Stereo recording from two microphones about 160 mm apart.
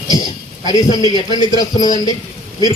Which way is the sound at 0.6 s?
25° left (ahead or behind).